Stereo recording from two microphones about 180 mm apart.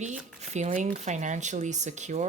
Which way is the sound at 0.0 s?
40° right (ahead or behind).